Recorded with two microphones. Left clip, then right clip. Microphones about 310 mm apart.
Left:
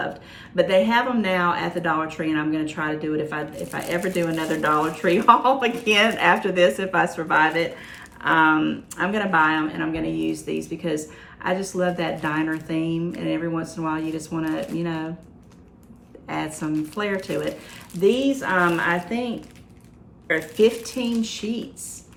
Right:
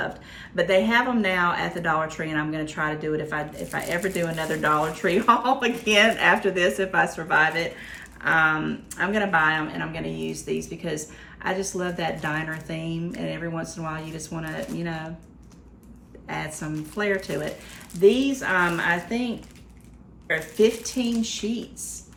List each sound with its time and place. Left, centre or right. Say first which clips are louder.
0.5 s speech: left 2 dB; centre
16.2 s speech: left 4 dB; centre